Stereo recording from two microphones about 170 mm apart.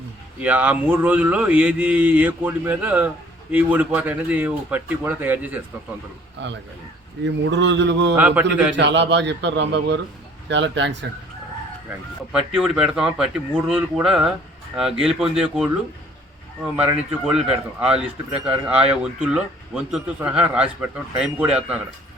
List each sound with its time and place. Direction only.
0.3 s a man's voice: 10° right (ahead or behind)
6.4 s a man's voice: 90° right
8.1 s a man's voice: 10° right (ahead or behind)
8.7 s a man's voice: 90° right
12.3 s a man's voice: 5° right (ahead or behind)
16.7 s a man's voice: 10° right (ahead or behind)